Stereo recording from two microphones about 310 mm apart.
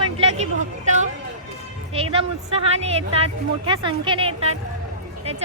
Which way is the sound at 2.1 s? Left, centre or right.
Centre.